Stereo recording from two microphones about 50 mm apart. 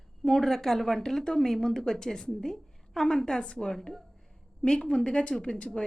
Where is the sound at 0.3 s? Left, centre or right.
Centre.